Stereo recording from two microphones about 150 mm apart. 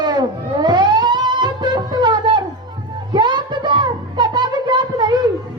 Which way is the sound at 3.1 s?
30° right (ahead or behind).